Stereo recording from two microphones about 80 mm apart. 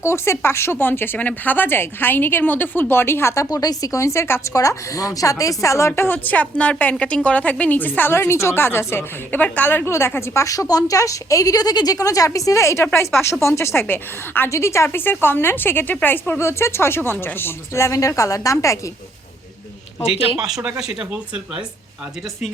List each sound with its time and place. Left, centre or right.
0.0 s a woman's voice: left
3.5 s a woman's voice: left
10.2 s a woman's voice: left
14.5 s a woman's voice: left
14.8 s a woman's voice: left
20.7 s speech: centre